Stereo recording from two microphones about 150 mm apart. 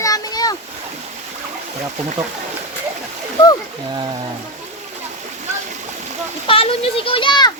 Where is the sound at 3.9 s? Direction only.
30° right (ahead or behind).